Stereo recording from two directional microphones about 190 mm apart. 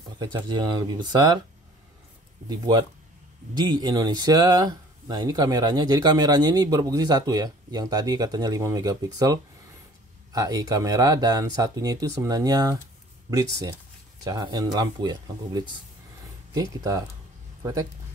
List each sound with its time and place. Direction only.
0.2 s speech: 25° right (ahead or behind)
2.4 s speech: 20° right (ahead or behind)
14.2 s speech: 20° right (ahead or behind)